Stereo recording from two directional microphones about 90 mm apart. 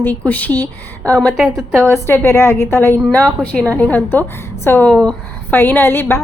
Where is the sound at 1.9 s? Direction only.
25° left (ahead or behind).